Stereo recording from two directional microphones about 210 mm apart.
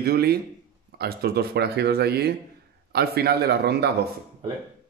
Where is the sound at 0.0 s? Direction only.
50° right (ahead or behind).